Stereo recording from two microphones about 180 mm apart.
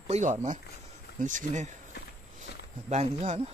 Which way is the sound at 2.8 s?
40° right (ahead or behind).